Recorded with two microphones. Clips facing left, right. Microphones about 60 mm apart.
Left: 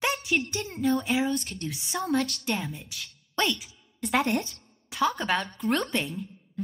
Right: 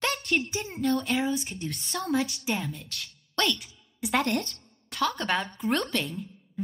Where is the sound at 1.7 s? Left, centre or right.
Centre.